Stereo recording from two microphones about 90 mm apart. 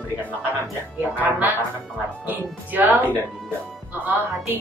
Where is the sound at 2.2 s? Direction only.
20° right (ahead or behind).